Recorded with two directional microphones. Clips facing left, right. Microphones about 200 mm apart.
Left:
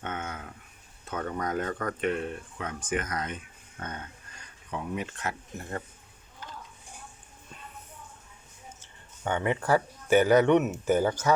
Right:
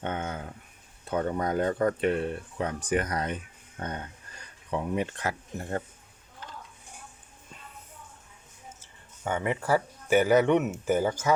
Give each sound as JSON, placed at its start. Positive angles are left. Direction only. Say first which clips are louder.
{"t": 0.0, "sound": "a sound", "louder": "right 4 dB", "side_deg": -30}
{"t": 1.1, "sound": "speech", "louder": "right 4 dB", "side_deg": -30}
{"t": 9.2, "sound": "speech", "louder": "left 1 dB", "side_deg": -5}